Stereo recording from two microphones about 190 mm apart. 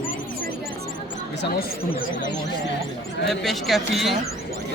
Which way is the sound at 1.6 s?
45° left (ahead or behind).